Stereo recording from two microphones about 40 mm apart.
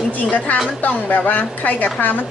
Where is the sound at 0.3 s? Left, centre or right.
Left.